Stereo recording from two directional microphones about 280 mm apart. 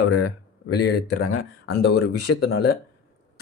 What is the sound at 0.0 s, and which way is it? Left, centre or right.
Speech, left.